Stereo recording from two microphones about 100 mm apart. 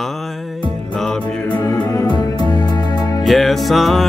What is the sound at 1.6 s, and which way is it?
Music, 30° left (ahead or behind).